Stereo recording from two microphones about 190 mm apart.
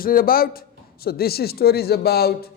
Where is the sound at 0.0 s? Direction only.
50° left (ahead or behind).